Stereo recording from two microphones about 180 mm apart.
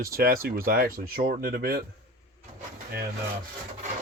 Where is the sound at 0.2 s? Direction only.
55° right (ahead or behind).